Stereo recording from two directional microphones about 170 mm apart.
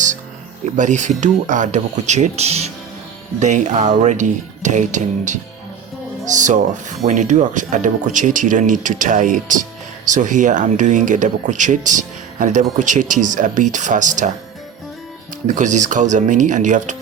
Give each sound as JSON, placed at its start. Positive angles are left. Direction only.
{"t": 0.6, "sound": "speech", "side_deg": -45}
{"t": 15.4, "sound": "speech", "side_deg": -45}